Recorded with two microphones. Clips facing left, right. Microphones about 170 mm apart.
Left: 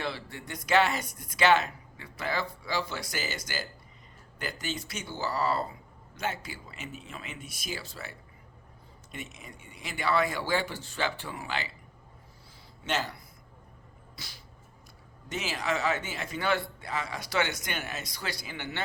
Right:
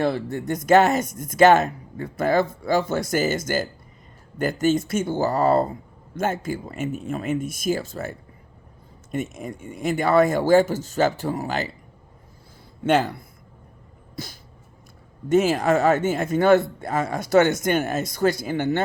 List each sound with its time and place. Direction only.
0.0 s speech: 50° right (ahead or behind)
9.1 s speech: 50° right (ahead or behind)
12.8 s speech: 55° right (ahead or behind)